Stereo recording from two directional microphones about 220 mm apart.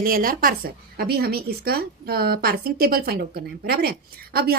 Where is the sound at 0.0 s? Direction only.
40° right (ahead or behind).